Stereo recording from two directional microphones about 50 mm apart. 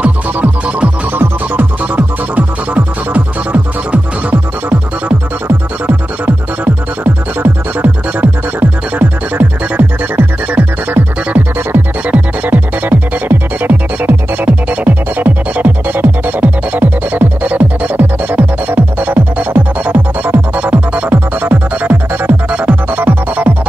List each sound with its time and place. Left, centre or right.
0.0 s music: right
1.1 s music: right
21.1 s music: right
22.5 s music: right
22.8 s music: right